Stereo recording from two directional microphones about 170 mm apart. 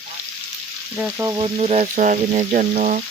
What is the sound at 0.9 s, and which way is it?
Frying, 5° right (ahead or behind).